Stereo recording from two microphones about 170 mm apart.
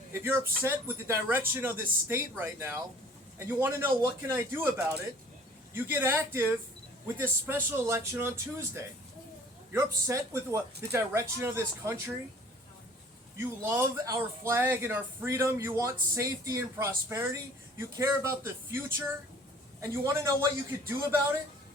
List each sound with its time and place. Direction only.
0.1 s speech: 15° right (ahead or behind)
13.4 s speech: 15° right (ahead or behind)